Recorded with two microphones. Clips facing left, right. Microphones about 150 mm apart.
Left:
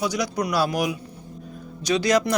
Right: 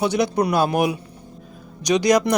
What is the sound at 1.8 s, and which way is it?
Speech, 15° right (ahead or behind).